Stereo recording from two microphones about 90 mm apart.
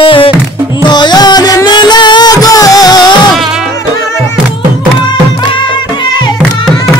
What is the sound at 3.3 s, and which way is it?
Music, 5° right (ahead or behind).